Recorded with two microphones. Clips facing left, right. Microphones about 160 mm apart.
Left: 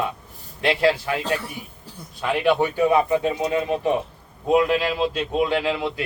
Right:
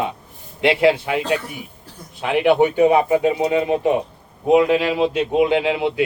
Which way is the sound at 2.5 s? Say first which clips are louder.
Right 5 dB; 20° right (ahead or behind).